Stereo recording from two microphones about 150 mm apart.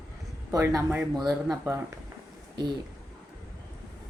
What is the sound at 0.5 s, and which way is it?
Speech, 20° right (ahead or behind).